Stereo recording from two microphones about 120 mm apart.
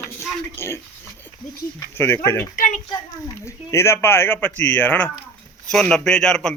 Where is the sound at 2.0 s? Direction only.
20° left (ahead or behind).